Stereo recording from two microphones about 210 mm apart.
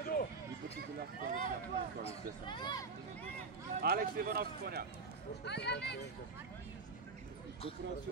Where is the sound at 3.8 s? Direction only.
45° right (ahead or behind).